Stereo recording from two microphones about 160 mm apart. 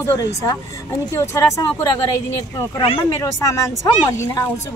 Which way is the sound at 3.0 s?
20° left (ahead or behind).